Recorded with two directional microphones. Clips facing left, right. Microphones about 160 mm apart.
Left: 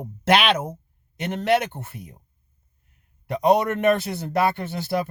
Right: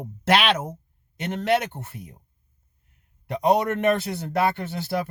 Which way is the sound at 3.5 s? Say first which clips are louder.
Left 2 dB; 15° left (ahead or behind).